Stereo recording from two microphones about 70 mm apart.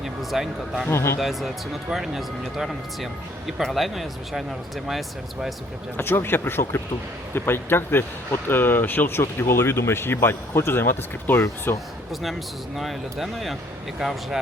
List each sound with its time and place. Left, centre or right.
0.0 s speech: centre
0.9 s speech: left
1.2 s speech: centre
6.0 s speech: left
12.2 s speech: centre